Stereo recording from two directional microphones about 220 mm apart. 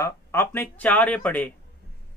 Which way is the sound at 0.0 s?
10° left (ahead or behind).